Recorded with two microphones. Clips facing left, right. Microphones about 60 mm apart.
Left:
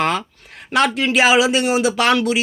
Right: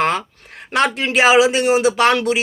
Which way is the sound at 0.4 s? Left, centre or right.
Right.